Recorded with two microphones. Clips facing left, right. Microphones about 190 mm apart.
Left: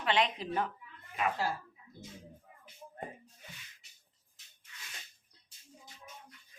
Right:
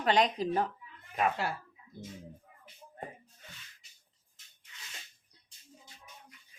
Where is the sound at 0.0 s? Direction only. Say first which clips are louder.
Right 4 dB; 40° right (ahead or behind).